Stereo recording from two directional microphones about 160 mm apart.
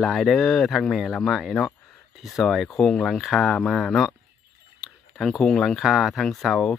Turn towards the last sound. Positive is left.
turn(degrees=0)  # may be behind; listen again after turning